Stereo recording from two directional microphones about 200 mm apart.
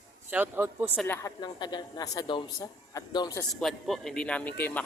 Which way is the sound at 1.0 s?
15° left (ahead or behind).